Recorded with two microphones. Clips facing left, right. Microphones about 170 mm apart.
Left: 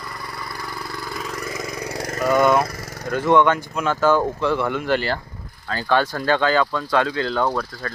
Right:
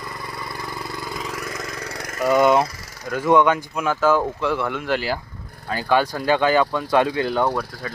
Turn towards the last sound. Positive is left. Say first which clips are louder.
# even
turn(degrees=-10)  # may be behind; listen again after turning